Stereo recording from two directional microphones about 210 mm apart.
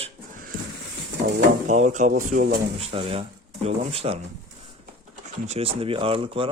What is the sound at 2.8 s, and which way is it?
Speech, 25° right (ahead or behind).